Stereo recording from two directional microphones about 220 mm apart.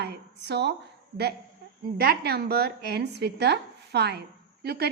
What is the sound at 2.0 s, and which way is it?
A woman's voice, 45° right (ahead or behind).